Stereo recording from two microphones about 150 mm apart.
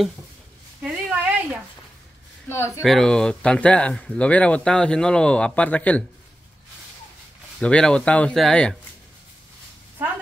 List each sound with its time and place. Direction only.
0.8 s a sound: 10° right (ahead or behind)
2.4 s speech: 15° left (ahead or behind)
2.8 s speech: 5° left (ahead or behind)
7.6 s speech: 5° left (ahead or behind)